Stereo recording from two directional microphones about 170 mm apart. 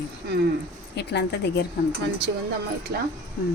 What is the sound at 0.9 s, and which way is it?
Speech, 80° left.